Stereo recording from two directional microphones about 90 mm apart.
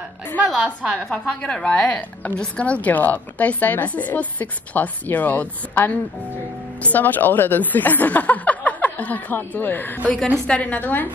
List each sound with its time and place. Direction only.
0.8 s a woman's voice: 10° left (ahead or behind)
10.1 s a woman's voice: 10° left (ahead or behind)